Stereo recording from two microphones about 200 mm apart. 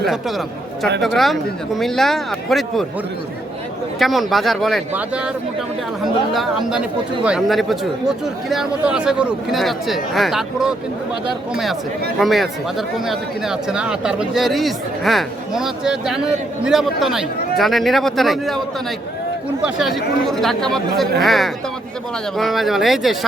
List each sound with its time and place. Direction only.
0.0 s a man's voice: centre (ahead or behind)
4.0 s a man's voice: centre (ahead or behind)
6.3 s a man's voice: centre (ahead or behind)
19.6 s a man's voice: centre (ahead or behind)